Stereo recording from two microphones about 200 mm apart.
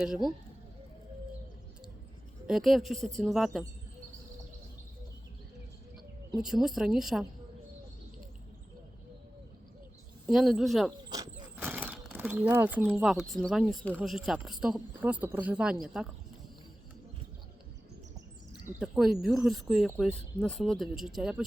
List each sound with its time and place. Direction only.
0.0 s speech: centre (ahead or behind)
2.5 s speech: centre (ahead or behind)
6.4 s speech: centre (ahead or behind)
10.2 s speech: centre (ahead or behind)
11.1 s vehicle: 20° right (ahead or behind)
11.7 s speech: 10° right (ahead or behind)
18.8 s speech: centre (ahead or behind)